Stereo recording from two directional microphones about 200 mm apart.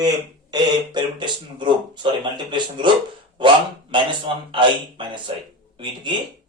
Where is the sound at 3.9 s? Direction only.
25° right (ahead or behind).